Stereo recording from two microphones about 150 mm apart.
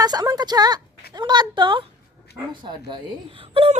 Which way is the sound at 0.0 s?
25° right (ahead or behind).